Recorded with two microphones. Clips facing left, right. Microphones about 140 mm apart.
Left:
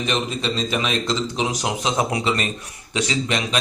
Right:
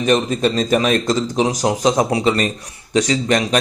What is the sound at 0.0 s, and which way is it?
A man's voice, 45° right (ahead or behind).